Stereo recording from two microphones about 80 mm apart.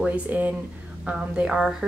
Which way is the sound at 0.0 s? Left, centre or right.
Centre.